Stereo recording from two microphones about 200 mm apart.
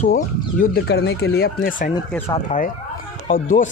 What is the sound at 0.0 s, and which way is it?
Speech, 45° left (ahead or behind).